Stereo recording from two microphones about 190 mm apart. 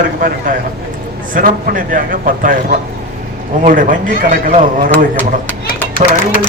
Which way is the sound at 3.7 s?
45° right (ahead or behind).